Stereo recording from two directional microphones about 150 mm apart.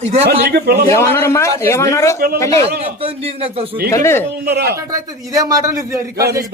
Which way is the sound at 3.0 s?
40° right (ahead or behind).